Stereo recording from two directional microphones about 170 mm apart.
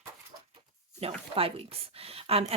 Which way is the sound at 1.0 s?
35° right (ahead or behind).